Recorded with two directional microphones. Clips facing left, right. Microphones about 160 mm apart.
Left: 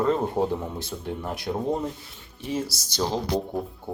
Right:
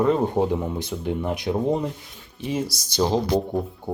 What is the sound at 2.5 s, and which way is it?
Speech, 15° right (ahead or behind).